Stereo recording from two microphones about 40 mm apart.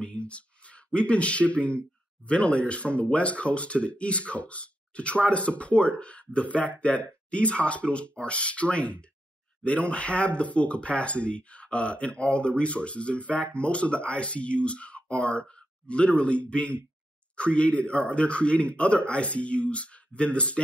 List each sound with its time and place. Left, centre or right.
0.0 s a man's voice: left